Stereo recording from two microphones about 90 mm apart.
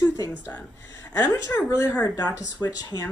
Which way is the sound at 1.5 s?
30° left (ahead or behind).